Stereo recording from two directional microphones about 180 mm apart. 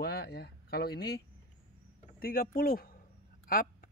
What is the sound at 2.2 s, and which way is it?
Speech, 55° left (ahead or behind).